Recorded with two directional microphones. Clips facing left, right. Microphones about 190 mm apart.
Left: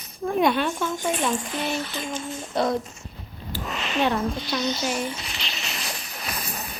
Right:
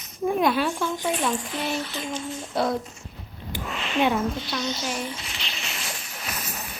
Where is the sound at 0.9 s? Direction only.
45° left (ahead or behind).